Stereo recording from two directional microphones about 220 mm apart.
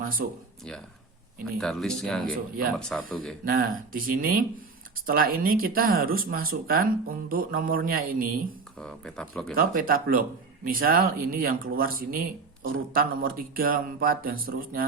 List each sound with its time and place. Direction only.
0.0 s speech: 40° right (ahead or behind)
1.5 s speech: centre (ahead or behind)
2.2 s speech: 40° right (ahead or behind)
2.7 s speech: 5° left (ahead or behind)
3.4 s speech: 40° right (ahead or behind)
8.8 s speech: 5° left (ahead or behind)
9.6 s speech: 40° right (ahead or behind)